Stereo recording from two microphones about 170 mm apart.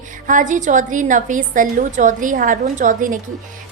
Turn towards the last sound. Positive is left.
turn(degrees=-50)  # may be behind; listen again after turning